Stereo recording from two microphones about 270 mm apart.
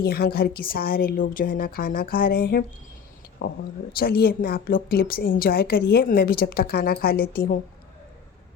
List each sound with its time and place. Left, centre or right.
0.0 s a woman's voice: left